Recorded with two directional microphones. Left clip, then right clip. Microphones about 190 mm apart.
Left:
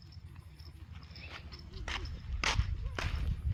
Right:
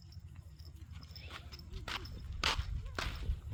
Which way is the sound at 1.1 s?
5° right (ahead or behind).